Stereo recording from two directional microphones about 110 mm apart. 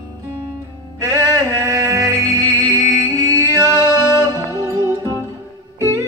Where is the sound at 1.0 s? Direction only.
30° right (ahead or behind).